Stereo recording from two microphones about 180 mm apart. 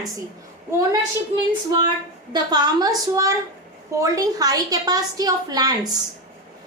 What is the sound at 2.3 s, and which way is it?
A woman's voice, 25° right (ahead or behind).